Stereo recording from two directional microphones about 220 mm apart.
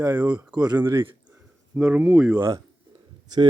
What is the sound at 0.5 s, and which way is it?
Speech, 20° right (ahead or behind).